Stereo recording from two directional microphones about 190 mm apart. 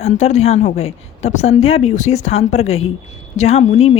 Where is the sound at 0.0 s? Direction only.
35° left (ahead or behind).